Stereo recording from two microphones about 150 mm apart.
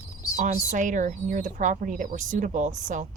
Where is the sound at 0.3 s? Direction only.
60° right (ahead or behind).